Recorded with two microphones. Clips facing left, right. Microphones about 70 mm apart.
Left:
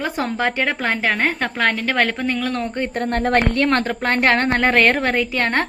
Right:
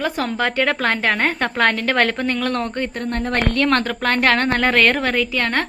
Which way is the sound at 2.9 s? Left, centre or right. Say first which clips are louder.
Left 7 dB; left.